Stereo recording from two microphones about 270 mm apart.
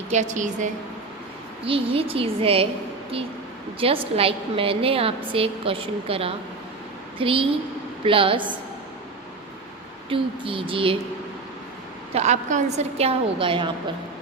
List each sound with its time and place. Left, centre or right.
0.1 s a woman's voice: right
3.8 s a woman's voice: right
10.1 s a woman's voice: centre
12.1 s a woman's voice: right